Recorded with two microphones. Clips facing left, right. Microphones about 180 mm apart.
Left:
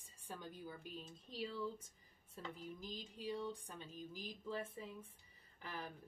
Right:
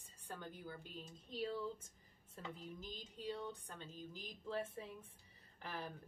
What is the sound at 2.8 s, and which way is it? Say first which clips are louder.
A woman's voice: even; 10° left (ahead or behind).